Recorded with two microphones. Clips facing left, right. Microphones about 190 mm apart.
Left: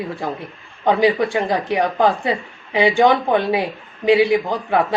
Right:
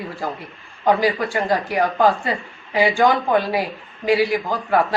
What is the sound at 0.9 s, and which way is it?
Speech, 25° left (ahead or behind).